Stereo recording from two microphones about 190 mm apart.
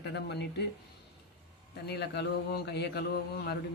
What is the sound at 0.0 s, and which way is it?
Speech, 65° left (ahead or behind).